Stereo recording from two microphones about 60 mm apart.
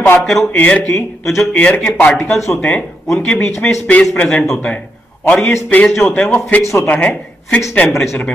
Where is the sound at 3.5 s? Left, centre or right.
Centre.